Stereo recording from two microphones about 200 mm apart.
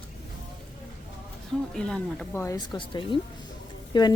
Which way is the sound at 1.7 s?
5° left (ahead or behind).